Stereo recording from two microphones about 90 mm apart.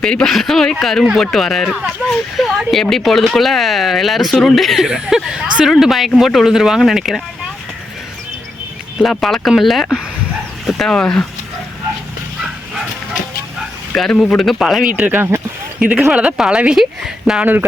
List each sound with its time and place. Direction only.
0.0 s speech: 5° left (ahead or behind)
9.0 s speech: centre (ahead or behind)
13.9 s speech: 5° left (ahead or behind)
15.0 s a woman's voice: 20° right (ahead or behind)
17.4 s speech: 20° right (ahead or behind)